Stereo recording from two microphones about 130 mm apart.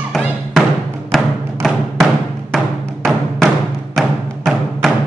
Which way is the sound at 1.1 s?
Centre (ahead or behind).